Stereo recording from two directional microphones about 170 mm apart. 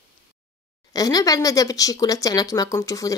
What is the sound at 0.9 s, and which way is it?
Speech, 20° left (ahead or behind).